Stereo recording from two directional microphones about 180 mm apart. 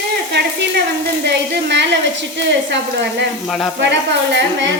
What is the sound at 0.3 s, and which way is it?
Sizzle, 75° right (ahead or behind).